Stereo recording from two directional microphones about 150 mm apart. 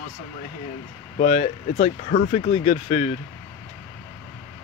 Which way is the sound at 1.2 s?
45° left (ahead or behind).